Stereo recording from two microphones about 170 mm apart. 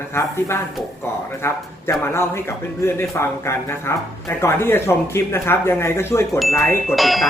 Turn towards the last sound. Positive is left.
turn(degrees=0)  # may be behind; listen again after turning